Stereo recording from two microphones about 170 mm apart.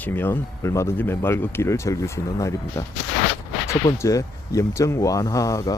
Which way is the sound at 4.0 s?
20° left (ahead or behind).